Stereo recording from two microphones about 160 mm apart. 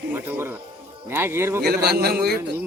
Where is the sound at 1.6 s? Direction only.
75° right (ahead or behind).